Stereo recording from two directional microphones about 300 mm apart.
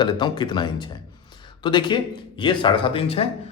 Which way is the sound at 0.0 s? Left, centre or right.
Centre.